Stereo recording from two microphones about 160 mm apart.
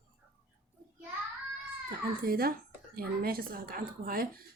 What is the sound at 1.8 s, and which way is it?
A child's voice, 70° right (ahead or behind).